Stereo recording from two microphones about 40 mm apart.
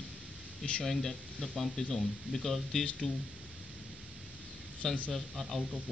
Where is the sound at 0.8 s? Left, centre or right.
Centre.